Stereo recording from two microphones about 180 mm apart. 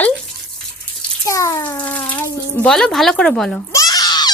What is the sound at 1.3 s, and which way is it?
A child's voice, 15° left (ahead or behind).